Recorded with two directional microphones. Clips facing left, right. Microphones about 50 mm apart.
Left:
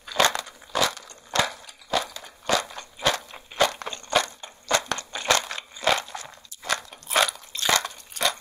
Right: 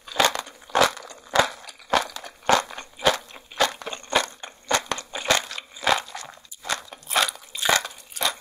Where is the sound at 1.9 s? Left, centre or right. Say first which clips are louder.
Right 4 dB; right.